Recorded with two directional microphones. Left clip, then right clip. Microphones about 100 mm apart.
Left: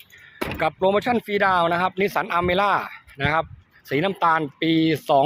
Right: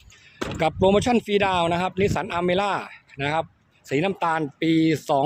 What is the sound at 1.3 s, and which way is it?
Speech, 50° right (ahead or behind).